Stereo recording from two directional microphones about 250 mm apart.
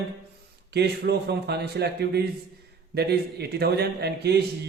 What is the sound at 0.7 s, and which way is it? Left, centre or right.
A man's voice, right.